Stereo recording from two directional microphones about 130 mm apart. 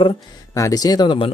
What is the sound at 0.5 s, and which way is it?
Speech, 25° left (ahead or behind).